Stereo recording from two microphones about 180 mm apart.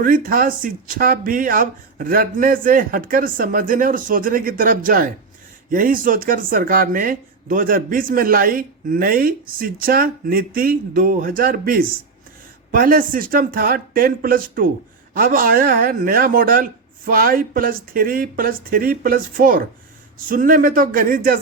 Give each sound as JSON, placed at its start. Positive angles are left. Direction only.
{"t": 0.0, "sound": "speech", "side_deg": -50}